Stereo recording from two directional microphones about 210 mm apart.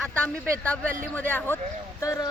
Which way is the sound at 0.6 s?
5° left (ahead or behind).